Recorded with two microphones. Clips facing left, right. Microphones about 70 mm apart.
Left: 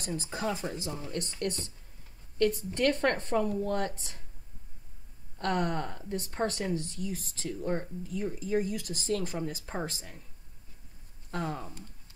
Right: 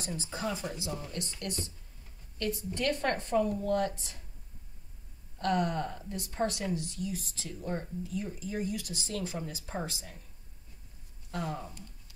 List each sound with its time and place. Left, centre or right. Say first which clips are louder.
0.1 s speech: left 3 dB; left
5.4 s speech: even; left
11.3 s speech: left 2 dB; left